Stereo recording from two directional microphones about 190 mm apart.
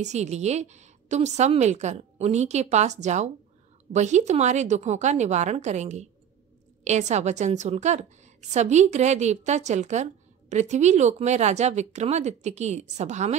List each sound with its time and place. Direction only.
0.0 s a woman's voice: 35° right (ahead or behind)